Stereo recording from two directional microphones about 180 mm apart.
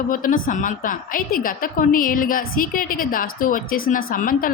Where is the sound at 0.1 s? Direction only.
50° left (ahead or behind).